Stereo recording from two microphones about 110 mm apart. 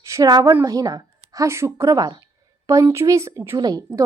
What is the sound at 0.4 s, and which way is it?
A woman's voice, 30° right (ahead or behind).